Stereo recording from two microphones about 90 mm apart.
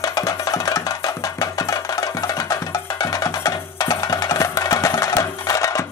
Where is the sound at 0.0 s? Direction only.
40° left (ahead or behind).